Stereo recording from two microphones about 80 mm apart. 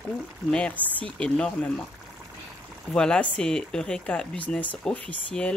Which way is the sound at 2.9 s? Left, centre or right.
Centre.